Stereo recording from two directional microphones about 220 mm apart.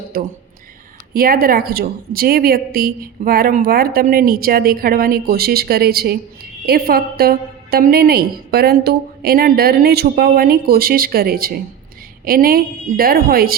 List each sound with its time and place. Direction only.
1.1 s a woman's voice: 40° right (ahead or behind)